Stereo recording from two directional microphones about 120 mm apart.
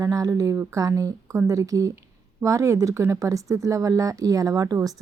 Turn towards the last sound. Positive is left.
turn(degrees=-30)  # may be behind; listen again after turning